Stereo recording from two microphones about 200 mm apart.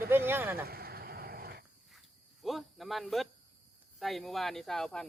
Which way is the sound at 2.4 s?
Centre (ahead or behind).